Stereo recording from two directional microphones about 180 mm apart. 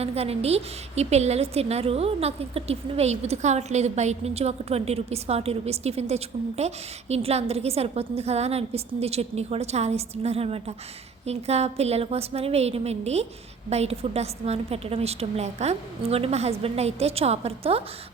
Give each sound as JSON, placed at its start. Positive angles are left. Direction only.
{"t": 0.0, "sound": "a woman's voice", "side_deg": -35}